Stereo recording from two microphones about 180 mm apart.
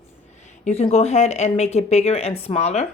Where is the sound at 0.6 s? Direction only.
35° left (ahead or behind).